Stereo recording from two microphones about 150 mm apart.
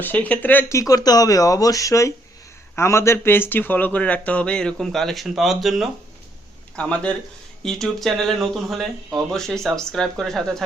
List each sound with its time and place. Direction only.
0.0 s speech: 10° left (ahead or behind)